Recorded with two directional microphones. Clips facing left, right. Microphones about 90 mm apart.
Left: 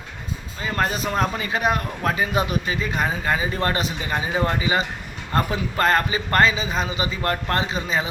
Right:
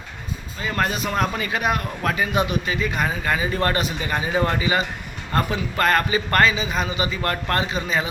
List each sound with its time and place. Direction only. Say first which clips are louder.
0.6 s a man's voice: even; 30° left (ahead or behind)